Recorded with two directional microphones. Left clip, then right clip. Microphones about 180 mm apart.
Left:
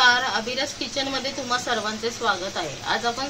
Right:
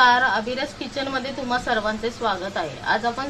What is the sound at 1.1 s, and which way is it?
Speech, 10° right (ahead or behind).